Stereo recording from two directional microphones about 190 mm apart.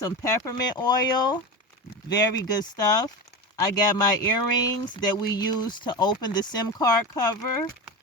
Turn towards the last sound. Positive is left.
turn(degrees=20)  # may be behind; listen again after turning